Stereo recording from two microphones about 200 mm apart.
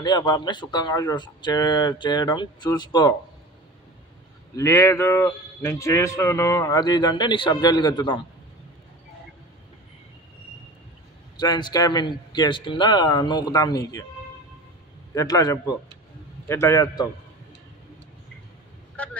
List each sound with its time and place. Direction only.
0.0 s speech: 20° left (ahead or behind)
4.6 s speech: 15° left (ahead or behind)
11.3 s speech: 20° left (ahead or behind)
15.1 s speech: 20° left (ahead or behind)